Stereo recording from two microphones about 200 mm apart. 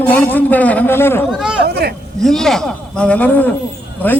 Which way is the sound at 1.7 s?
55° right (ahead or behind).